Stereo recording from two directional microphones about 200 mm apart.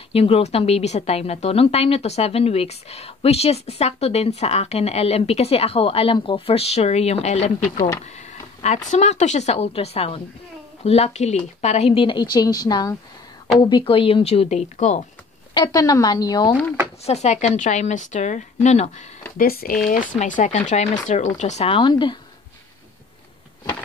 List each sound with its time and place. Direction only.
0.1 s speech: 30° left (ahead or behind)
15.5 s speech: 20° left (ahead or behind)
17.0 s speech: 35° left (ahead or behind)
19.3 s speech: 50° left (ahead or behind); by 22.2 s 25° left (ahead or behind)